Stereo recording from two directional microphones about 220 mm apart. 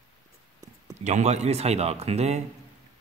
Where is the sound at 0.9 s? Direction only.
30° right (ahead or behind).